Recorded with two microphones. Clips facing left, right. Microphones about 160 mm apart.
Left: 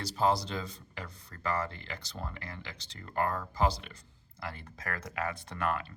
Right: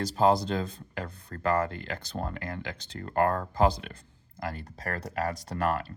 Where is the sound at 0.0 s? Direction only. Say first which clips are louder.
Right 5 dB; 50° right (ahead or behind).